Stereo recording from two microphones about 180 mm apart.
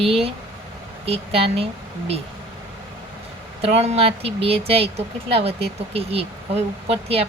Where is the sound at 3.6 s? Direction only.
35° right (ahead or behind).